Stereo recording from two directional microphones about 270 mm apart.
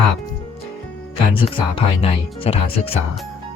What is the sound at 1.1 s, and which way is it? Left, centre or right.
Speech, centre.